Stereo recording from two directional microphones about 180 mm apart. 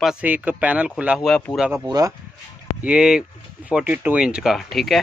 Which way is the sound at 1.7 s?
20° right (ahead or behind).